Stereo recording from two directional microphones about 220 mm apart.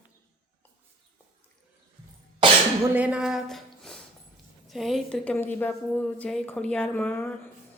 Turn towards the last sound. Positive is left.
turn(degrees=10)  # may be behind; listen again after turning